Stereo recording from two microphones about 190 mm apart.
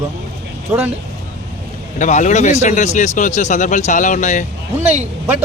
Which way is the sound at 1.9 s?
40° left (ahead or behind).